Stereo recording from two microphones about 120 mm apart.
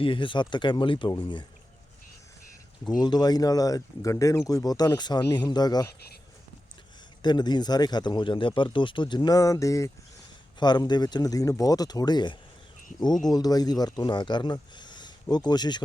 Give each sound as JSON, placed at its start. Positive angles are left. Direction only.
{"t": 0.0, "sound": "speech", "side_deg": 45}
{"t": 3.0, "sound": "speech", "side_deg": 35}
{"t": 7.2, "sound": "speech", "side_deg": 35}
{"t": 10.6, "sound": "speech", "side_deg": 35}